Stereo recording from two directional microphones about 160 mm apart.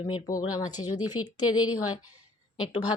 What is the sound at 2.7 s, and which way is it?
Speech, 30° left (ahead or behind).